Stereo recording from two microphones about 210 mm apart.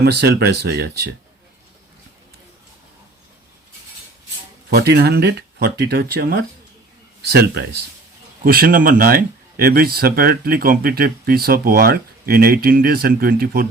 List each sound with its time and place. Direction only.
0.0 s speech: 50° right (ahead or behind)
4.7 s speech: 50° right (ahead or behind)